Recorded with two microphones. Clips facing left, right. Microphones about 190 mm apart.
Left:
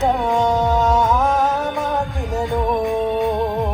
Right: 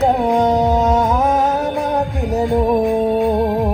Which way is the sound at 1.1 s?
20° right (ahead or behind).